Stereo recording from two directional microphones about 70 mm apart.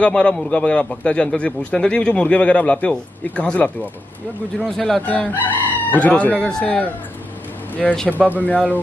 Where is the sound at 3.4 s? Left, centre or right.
Centre.